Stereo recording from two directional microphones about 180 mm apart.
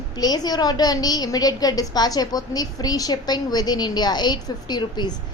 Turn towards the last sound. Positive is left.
turn(degrees=25)  # may be behind; listen again after turning